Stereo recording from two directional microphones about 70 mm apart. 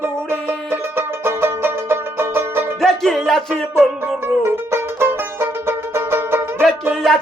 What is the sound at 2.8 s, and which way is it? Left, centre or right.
Music, centre.